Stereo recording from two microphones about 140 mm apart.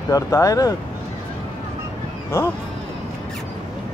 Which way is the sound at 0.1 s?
25° left (ahead or behind).